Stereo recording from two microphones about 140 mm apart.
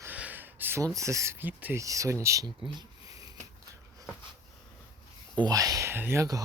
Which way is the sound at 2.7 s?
25° right (ahead or behind).